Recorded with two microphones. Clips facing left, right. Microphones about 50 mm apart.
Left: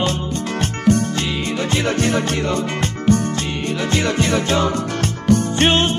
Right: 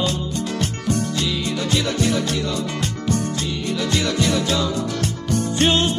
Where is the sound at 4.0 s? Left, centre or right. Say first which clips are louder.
Left 3 dB; left.